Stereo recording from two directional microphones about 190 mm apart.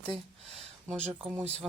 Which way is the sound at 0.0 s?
30° right (ahead or behind).